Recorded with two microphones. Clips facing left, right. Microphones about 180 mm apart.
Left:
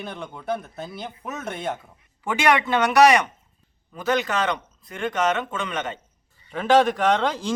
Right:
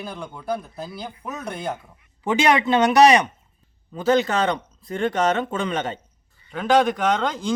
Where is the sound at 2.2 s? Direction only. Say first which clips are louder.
Right 2 dB; 20° right (ahead or behind).